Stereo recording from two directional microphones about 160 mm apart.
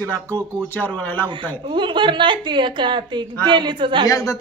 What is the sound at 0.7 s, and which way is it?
Speech, 10° left (ahead or behind).